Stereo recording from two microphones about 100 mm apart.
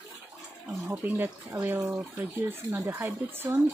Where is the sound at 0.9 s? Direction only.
20° right (ahead or behind).